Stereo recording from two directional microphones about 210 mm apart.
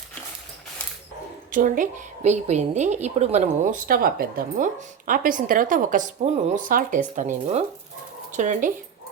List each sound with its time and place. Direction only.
1.5 s a woman's voice: 40° right (ahead or behind)